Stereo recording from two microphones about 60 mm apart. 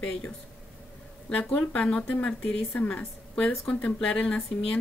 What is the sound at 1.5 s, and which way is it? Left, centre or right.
A woman's voice, left.